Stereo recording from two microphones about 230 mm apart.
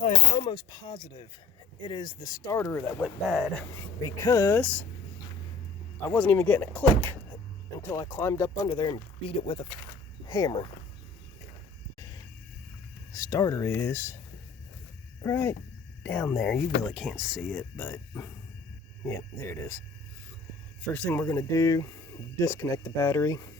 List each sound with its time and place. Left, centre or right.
0.0 s speech: left; by 4.9 s centre
6.1 s speech: centre
13.1 s speech: centre
15.2 s speech: centre
20.8 s speech: centre